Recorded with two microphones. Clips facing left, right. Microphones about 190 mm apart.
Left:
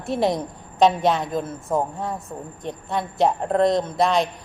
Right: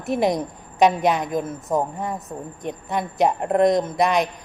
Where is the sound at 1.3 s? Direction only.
20° right (ahead or behind).